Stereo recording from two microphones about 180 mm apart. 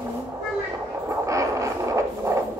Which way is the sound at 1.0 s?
15° right (ahead or behind).